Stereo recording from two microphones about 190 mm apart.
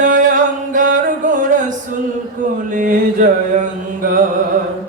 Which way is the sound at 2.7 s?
45° right (ahead or behind).